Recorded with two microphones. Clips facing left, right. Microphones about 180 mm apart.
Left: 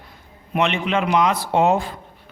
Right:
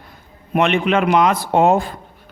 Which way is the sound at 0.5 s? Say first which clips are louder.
Right 4 dB; 55° right (ahead or behind).